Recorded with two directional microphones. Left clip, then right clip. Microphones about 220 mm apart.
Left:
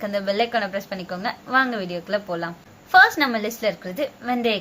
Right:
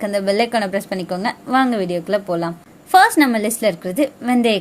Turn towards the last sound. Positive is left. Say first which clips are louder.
# right 5 dB
turn(degrees=-40)  # may be behind; listen again after turning